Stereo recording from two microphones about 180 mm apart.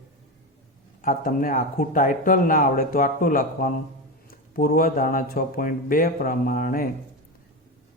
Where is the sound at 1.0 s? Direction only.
50° left (ahead or behind).